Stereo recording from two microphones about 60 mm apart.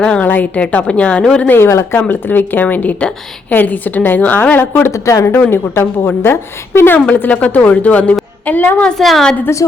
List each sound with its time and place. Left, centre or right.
0.0 s a woman's voice: centre
0.3 s a woman's voice: left
1.5 s a woman's voice: left
2.0 s a woman's voice: left
4.9 s speech: left
5.3 s a woman's voice: left
7.1 s a woman's voice: left
9.0 s a woman's voice: centre